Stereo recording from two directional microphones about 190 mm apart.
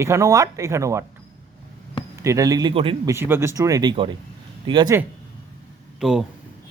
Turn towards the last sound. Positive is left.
turn(degrees=0)  # may be behind; listen again after turning